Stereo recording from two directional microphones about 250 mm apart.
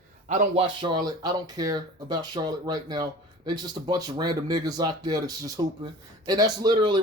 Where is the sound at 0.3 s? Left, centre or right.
Right.